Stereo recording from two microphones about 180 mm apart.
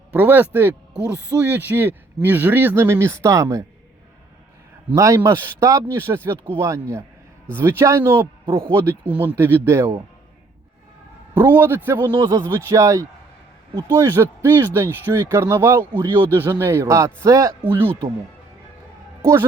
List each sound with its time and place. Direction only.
0.1 s speech: 10° right (ahead or behind)
4.9 s speech: 15° right (ahead or behind)
11.3 s speech: 10° right (ahead or behind)
15.9 s speech: 25° right (ahead or behind)
16.4 s speech: 15° right (ahead or behind)
19.2 s speech: 15° right (ahead or behind)